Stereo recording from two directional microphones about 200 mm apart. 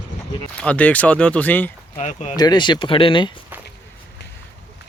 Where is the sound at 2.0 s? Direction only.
35° left (ahead or behind).